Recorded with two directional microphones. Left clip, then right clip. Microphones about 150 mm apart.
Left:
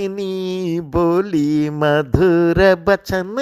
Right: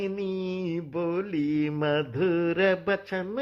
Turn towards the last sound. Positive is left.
turn(degrees=40)  # may be behind; listen again after turning